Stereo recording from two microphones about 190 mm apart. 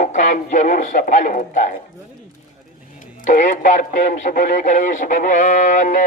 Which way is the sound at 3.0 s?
45° left (ahead or behind).